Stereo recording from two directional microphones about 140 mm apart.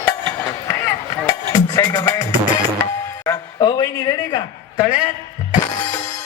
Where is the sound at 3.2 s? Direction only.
25° left (ahead or behind).